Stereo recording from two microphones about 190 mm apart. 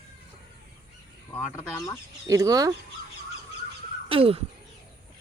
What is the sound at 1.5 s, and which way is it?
Speech, 15° left (ahead or behind).